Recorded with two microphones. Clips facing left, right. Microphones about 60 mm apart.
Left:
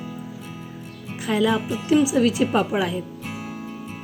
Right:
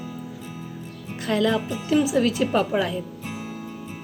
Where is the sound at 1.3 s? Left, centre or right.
Centre.